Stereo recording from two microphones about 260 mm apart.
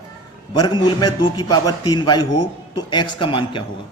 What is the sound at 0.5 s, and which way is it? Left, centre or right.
A man's voice, centre.